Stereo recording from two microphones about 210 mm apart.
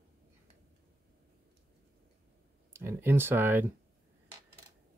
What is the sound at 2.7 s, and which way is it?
Speech, 10° right (ahead or behind).